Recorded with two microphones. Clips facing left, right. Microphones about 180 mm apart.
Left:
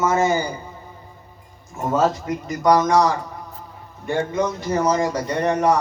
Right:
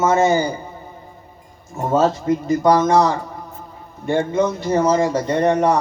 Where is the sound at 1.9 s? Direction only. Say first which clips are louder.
Right 3 dB; 30° right (ahead or behind).